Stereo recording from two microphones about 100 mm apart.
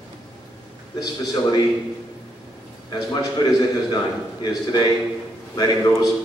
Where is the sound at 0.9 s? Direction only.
40° left (ahead or behind).